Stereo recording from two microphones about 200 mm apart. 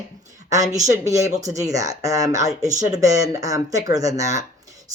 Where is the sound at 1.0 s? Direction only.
15° right (ahead or behind).